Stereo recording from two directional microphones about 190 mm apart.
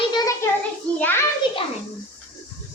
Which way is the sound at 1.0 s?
10° left (ahead or behind).